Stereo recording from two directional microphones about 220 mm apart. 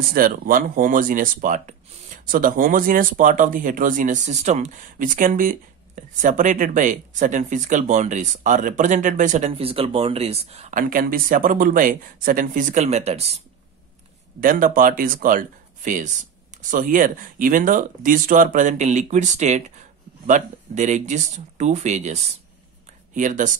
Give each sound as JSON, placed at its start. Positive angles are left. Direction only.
{"t": 0.1, "sound": "speech", "side_deg": -40}
{"t": 14.4, "sound": "speech", "side_deg": -40}